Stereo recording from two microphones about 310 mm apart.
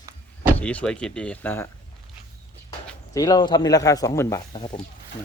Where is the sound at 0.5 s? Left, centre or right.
Centre.